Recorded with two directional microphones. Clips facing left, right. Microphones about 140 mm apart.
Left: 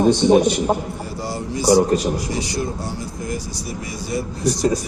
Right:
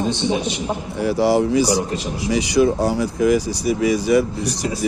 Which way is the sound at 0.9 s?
90° right.